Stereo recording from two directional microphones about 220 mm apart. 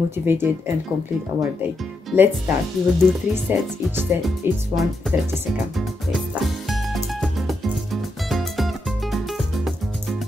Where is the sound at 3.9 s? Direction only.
10° right (ahead or behind).